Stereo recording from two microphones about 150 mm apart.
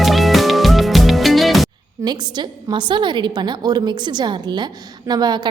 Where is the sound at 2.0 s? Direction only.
30° right (ahead or behind).